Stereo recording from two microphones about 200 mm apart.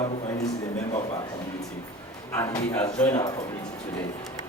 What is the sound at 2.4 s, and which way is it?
Speech, 10° left (ahead or behind).